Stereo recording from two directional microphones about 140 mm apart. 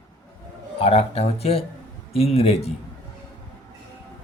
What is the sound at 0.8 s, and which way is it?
Speech, 45° left (ahead or behind).